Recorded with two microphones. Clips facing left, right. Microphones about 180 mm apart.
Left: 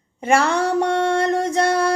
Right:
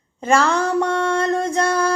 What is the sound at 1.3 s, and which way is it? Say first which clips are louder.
Music: left 1 dB; 70° left (ahead or behind).